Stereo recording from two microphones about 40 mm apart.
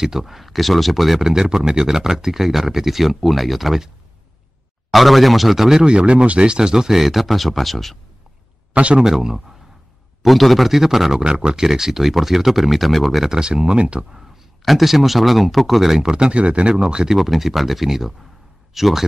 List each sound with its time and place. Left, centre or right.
0.0 s speech: centre
4.9 s speech: centre
5.7 s speech: right; by 8.0 s centre
8.9 s speech: centre
10.2 s speech: centre
11.2 s speech: right; by 13.2 s centre
13.2 s speech: centre
14.6 s speech: centre
16.0 s speech: centre
17.2 s speech: centre